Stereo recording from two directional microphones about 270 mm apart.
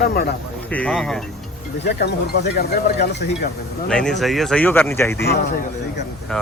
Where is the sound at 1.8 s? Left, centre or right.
Left.